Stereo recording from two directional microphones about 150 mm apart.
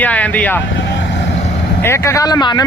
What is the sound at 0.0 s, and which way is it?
Speech, 10° left (ahead or behind).